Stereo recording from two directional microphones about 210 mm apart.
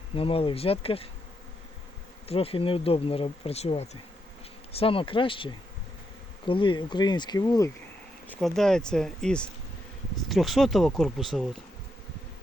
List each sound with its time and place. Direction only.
0.2 s speech: 25° left (ahead or behind)
2.2 s speech: 25° left (ahead or behind)
8.3 s speech: centre (ahead or behind)